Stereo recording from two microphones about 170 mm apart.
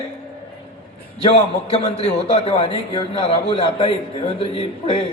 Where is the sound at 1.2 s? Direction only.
35° left (ahead or behind).